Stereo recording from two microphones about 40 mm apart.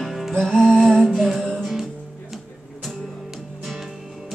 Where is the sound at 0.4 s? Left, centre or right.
Centre.